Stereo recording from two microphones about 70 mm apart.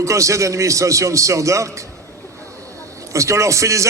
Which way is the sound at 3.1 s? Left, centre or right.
Right.